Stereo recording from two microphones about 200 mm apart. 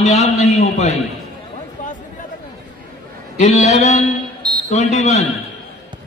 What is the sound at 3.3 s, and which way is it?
Speech, 35° left (ahead or behind).